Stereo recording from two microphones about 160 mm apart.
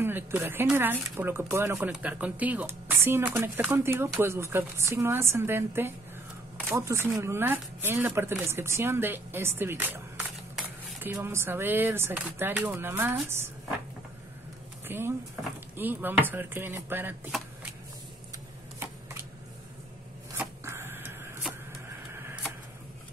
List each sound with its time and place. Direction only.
0.0 s speech: 15° right (ahead or behind)
14.9 s speech: 15° right (ahead or behind)
20.3 s a sound: 15° right (ahead or behind)